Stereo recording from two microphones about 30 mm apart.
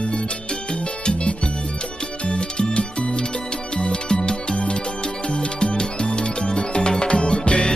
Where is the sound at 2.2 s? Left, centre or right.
Left.